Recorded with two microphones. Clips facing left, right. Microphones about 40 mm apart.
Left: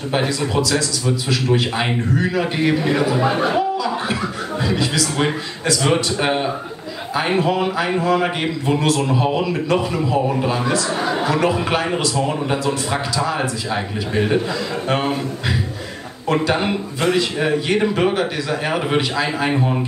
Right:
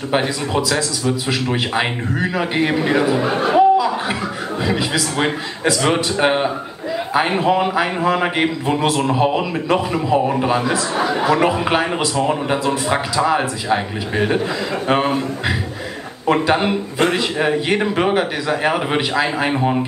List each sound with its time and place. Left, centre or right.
0.1 s a man's voice: centre
3.2 s speech: centre
3.5 s a man's voice: centre